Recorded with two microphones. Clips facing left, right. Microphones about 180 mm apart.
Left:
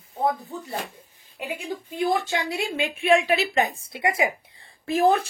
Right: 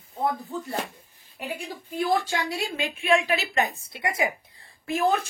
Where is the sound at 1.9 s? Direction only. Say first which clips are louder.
Even; 20° left (ahead or behind).